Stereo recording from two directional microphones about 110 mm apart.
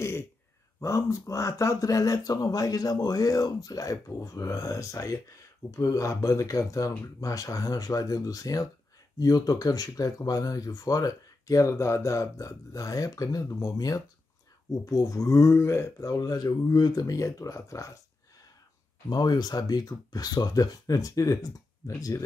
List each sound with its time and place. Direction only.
0.7 s speech: 25° left (ahead or behind)
19.0 s speech: 40° left (ahead or behind)